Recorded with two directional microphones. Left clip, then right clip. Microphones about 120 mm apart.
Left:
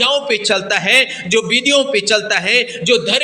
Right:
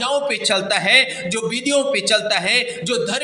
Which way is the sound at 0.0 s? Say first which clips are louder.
Left 5 dB; 25° left (ahead or behind).